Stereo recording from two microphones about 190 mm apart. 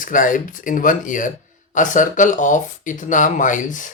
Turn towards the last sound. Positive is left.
turn(degrees=40)  # may be behind; listen again after turning